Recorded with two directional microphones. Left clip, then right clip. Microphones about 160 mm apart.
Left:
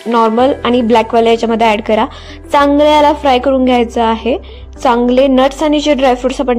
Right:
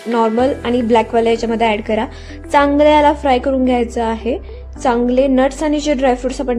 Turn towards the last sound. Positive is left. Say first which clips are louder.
# left 4 dB
turn(degrees=15)  # may be behind; listen again after turning